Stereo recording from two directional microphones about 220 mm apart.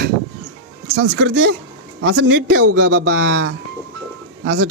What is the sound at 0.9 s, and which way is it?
A man's voice, 60° right (ahead or behind).